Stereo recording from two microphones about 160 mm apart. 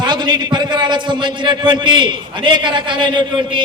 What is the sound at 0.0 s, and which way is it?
A man's voice, 30° right (ahead or behind).